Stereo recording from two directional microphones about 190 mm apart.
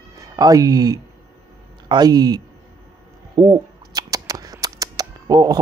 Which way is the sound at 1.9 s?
20° right (ahead or behind).